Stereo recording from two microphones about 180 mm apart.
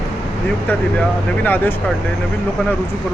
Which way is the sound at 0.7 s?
10° left (ahead or behind).